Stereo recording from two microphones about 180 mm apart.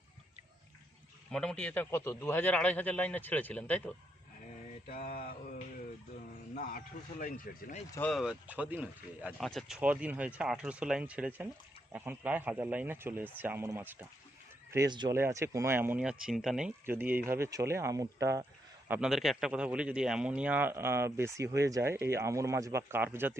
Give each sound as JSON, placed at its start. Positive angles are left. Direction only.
{"t": 1.3, "sound": "a man's voice", "side_deg": 5}
{"t": 5.1, "sound": "mantra", "side_deg": 60}
{"t": 6.5, "sound": "speech", "side_deg": 50}
{"t": 7.9, "sound": "a man's voice", "side_deg": 15}
{"t": 8.1, "sound": "a man's voice", "side_deg": -5}
{"t": 9.4, "sound": "a man's voice", "side_deg": 0}
{"t": 18.9, "sound": "a man's voice", "side_deg": -5}